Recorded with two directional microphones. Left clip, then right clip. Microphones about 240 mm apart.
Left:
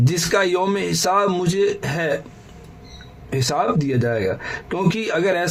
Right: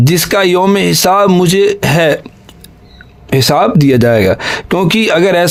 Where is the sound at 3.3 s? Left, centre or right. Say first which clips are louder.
Right 11 dB; right.